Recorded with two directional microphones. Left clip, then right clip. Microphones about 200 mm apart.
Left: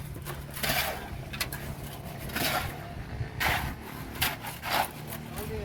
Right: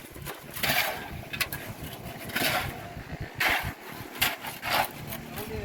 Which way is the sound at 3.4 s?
20° right (ahead or behind).